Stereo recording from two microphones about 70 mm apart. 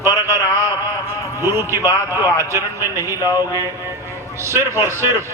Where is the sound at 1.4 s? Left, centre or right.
Right.